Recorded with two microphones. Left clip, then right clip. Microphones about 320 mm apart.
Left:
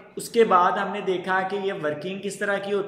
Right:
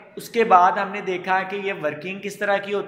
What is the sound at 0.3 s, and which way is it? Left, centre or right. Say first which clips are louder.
A man's voice: right 3 dB; centre.